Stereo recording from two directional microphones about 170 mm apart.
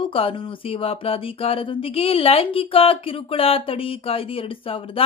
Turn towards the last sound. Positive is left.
turn(degrees=35)  # may be behind; listen again after turning